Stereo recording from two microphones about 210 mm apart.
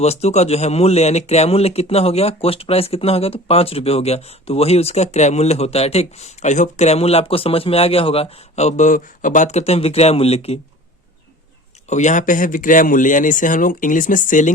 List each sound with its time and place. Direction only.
0.0 s speech: 30° left (ahead or behind)
11.9 s speech: 35° left (ahead or behind)